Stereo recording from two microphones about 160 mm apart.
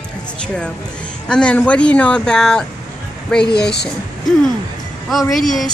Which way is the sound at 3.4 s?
90° left.